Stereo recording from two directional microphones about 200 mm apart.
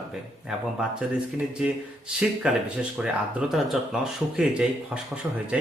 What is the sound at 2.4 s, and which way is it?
A man's voice, 5° right (ahead or behind).